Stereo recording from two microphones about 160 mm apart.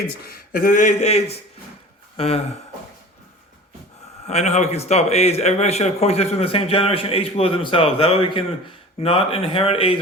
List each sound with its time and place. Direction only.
0.3 s speech: 65° left (ahead or behind); by 2.4 s 40° left (ahead or behind)
4.3 s a man's voice: 45° left (ahead or behind)